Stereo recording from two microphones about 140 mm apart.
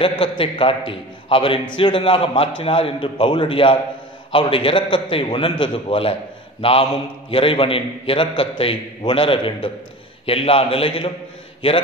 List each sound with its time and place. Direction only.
0.2 s a man's voice: 40° left (ahead or behind)